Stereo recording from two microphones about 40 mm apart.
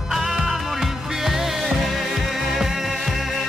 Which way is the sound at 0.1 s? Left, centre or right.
Centre.